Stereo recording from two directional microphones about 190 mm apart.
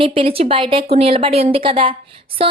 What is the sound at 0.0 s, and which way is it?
A woman's voice, 30° right (ahead or behind).